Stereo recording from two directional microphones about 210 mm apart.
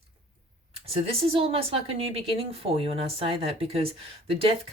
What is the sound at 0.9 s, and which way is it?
Speech, 25° right (ahead or behind).